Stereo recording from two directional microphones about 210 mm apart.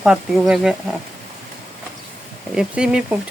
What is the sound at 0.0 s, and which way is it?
Speech, 5° right (ahead or behind).